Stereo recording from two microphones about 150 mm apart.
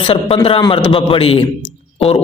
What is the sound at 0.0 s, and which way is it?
A man's voice, 40° left (ahead or behind).